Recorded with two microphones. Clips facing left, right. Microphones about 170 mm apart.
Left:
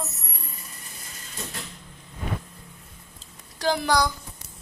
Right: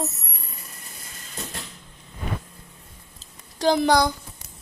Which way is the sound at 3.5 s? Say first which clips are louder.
Right 5 dB; 20° right (ahead or behind).